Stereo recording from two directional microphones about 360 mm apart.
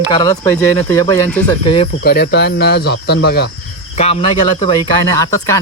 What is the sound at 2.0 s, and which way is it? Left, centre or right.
Speech, left.